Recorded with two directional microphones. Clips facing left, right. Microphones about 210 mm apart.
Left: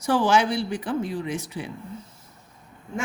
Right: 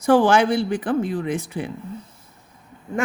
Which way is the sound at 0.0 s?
50° right (ahead or behind).